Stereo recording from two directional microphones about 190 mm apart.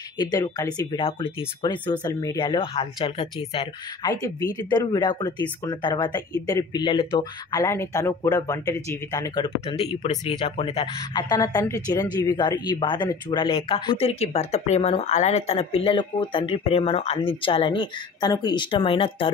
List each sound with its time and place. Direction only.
0.2 s speech: 20° left (ahead or behind)
4.1 s speech: 20° left (ahead or behind)
7.6 s speech: 15° left (ahead or behind)